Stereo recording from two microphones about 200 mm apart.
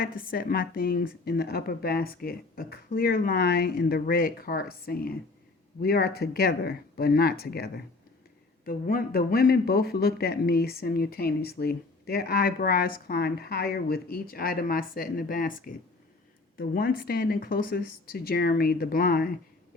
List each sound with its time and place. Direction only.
0.0 s speech: 45° left (ahead or behind)